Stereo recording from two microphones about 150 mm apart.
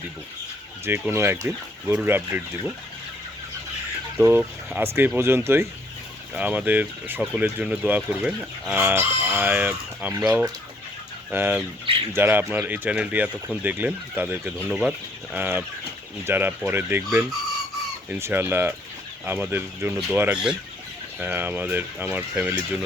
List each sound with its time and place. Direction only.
0.9 s speech: 15° right (ahead or behind)
4.2 s speech: 15° right (ahead or behind)